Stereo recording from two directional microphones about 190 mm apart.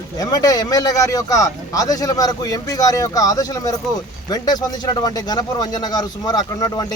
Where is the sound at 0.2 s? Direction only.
20° left (ahead or behind).